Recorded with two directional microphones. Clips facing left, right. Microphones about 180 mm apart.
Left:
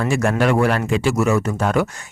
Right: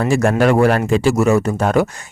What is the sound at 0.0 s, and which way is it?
Speech, 35° right (ahead or behind).